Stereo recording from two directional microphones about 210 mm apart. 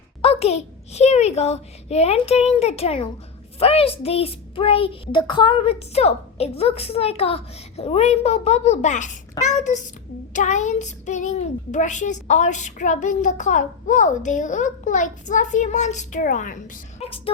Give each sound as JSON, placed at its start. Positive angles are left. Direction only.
{"t": 0.2, "sound": "a child's voice", "side_deg": 30}
{"t": 17.0, "sound": "speech", "side_deg": 25}